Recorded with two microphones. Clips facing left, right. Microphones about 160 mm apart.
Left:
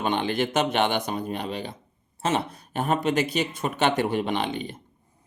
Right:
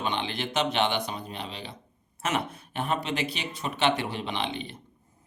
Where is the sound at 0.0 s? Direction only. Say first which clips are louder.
Left 6 dB; 45° left (ahead or behind).